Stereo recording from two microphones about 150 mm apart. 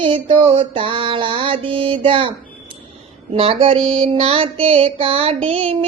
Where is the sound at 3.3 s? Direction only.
40° right (ahead or behind).